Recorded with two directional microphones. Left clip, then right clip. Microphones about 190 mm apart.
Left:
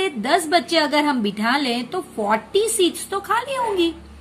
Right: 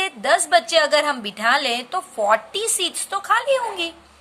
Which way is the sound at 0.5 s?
30° right (ahead or behind).